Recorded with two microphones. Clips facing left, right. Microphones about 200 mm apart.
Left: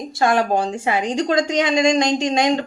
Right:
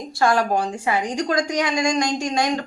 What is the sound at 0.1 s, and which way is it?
A woman's voice, 20° left (ahead or behind).